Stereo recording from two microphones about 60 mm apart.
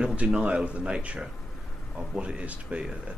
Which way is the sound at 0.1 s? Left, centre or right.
Right.